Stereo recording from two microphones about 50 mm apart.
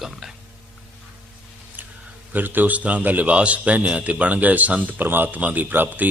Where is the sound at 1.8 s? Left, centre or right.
Right.